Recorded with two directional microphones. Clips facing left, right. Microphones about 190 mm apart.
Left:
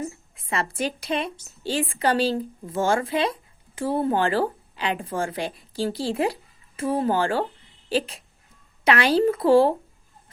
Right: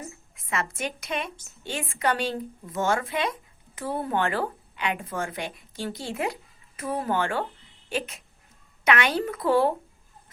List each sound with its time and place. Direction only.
0.3 s speech: 30° left (ahead or behind)